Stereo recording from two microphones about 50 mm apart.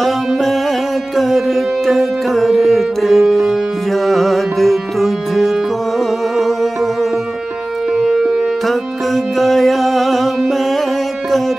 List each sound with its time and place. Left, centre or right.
0.0 s music: centre